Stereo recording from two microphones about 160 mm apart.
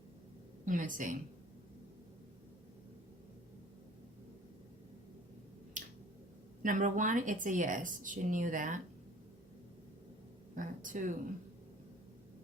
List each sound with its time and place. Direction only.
0.6 s speech: 55° right (ahead or behind)
5.8 s finger snapping: 55° right (ahead or behind)
6.6 s speech: 55° right (ahead or behind)
10.5 s speech: 55° right (ahead or behind)